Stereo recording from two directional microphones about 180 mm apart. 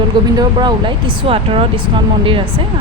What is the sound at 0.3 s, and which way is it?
Speech, 25° right (ahead or behind).